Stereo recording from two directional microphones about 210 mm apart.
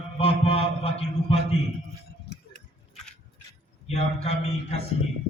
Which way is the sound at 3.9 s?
30° left (ahead or behind).